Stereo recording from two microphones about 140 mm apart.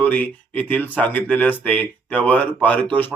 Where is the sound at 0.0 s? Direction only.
10° left (ahead or behind).